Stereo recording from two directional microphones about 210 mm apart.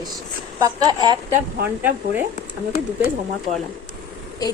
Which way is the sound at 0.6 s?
20° right (ahead or behind).